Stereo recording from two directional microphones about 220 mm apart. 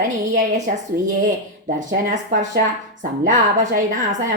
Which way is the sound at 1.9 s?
35° right (ahead or behind).